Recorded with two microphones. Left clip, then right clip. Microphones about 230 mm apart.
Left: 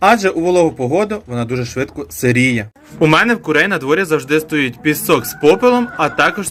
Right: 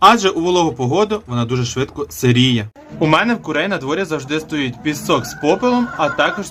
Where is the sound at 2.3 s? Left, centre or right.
Right.